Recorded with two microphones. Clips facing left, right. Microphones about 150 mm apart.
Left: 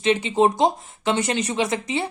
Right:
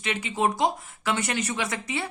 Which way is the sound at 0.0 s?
25° left (ahead or behind).